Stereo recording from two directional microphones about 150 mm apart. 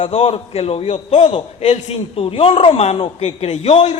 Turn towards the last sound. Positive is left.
turn(degrees=45)  # may be behind; listen again after turning